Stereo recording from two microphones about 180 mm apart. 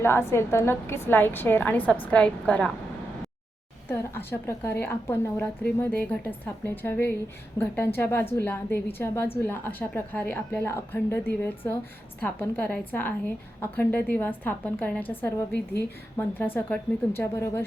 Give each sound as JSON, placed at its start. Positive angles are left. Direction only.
{"t": 0.0, "sound": "a woman's voice", "side_deg": 15}
{"t": 3.8, "sound": "a woman's voice", "side_deg": 10}